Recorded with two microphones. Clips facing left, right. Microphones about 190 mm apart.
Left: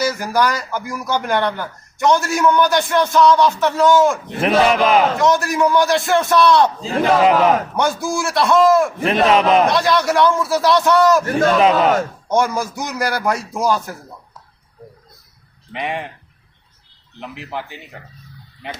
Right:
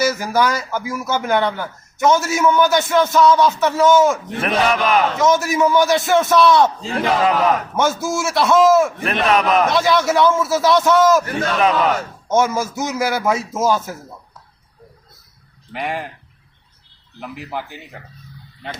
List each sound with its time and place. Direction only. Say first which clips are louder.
0.0 s speech: right 1 dB; 5° right (ahead or behind)
4.4 s a man's voice: left 7 dB; 30° left (ahead or behind)
5.4 s speech: even; centre (ahead or behind)
6.9 s a man's voice: left 7 dB; 25° left (ahead or behind)
7.8 s speech: right 1 dB; centre (ahead or behind)
8.0 s a man's voice: even; 20° right (ahead or behind)
8.3 s speech: even; centre (ahead or behind)
9.0 s a man's voice: left 3 dB; 35° left (ahead or behind)
9.7 s speech: even; 5° right (ahead or behind)
11.3 s a man's voice: left 4 dB; 35° left (ahead or behind)
12.4 s speech: right 1 dB; 5° right (ahead or behind)
13.4 s a man's voice: right 1 dB; 20° right (ahead or behind)
15.7 s speech: even; centre (ahead or behind)
17.2 s speech: even; 5° right (ahead or behind)